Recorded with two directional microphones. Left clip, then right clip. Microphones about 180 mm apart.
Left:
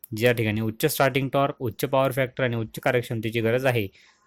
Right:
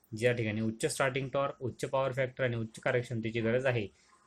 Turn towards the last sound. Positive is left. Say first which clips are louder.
# left 8 dB
turn(degrees=50)  # may be behind; listen again after turning